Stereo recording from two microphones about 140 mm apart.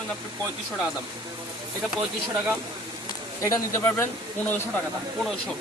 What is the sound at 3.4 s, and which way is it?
Speech, 20° left (ahead or behind).